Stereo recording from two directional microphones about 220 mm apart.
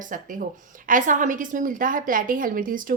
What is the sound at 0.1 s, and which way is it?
A woman's voice, 35° right (ahead or behind).